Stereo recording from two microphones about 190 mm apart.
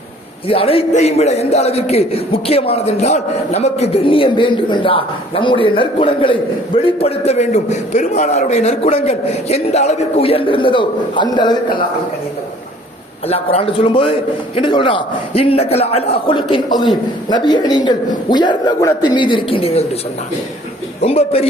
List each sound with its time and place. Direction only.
0.4 s a man's voice: 30° left (ahead or behind)
13.2 s a man's voice: 30° left (ahead or behind)
21.0 s a man's voice: 30° left (ahead or behind)